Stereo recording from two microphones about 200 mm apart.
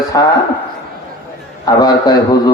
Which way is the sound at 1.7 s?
20° left (ahead or behind).